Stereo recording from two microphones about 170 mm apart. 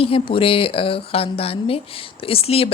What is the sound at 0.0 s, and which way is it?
Speech, 35° left (ahead or behind).